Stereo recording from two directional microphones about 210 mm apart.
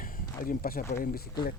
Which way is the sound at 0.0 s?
40° left (ahead or behind).